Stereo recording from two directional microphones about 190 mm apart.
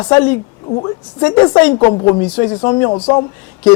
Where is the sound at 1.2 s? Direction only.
10° left (ahead or behind).